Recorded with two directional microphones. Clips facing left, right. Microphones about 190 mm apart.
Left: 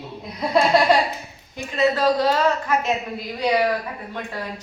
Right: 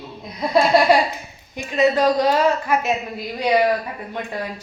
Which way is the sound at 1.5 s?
15° right (ahead or behind).